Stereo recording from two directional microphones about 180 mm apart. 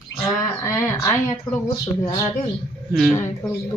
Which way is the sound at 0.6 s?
15° left (ahead or behind).